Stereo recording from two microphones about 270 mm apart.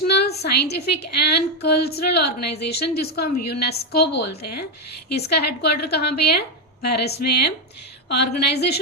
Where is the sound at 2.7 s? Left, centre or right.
Left.